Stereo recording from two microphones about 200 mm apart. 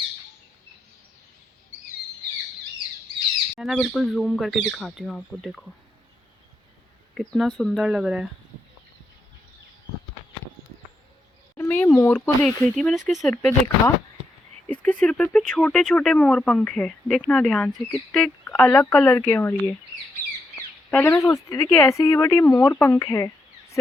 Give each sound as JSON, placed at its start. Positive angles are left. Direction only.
{"t": 3.5, "sound": "speech", "side_deg": 0}
{"t": 7.1, "sound": "speech", "side_deg": 0}
{"t": 11.5, "sound": "speech", "side_deg": 10}
{"t": 13.3, "sound": "speech", "side_deg": 10}
{"t": 20.2, "sound": "bird", "side_deg": -15}
{"t": 20.9, "sound": "speech", "side_deg": 5}